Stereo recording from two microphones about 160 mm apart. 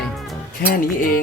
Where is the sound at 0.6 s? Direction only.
60° left (ahead or behind).